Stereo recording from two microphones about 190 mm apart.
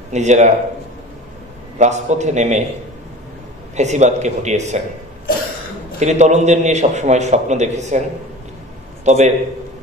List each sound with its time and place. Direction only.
0.1 s a man's voice: 40° right (ahead or behind)
1.8 s a man's voice: 35° right (ahead or behind)
3.7 s a man's voice: 35° right (ahead or behind)
5.9 s a man's voice: 35° right (ahead or behind)
9.0 s a man's voice: 35° right (ahead or behind)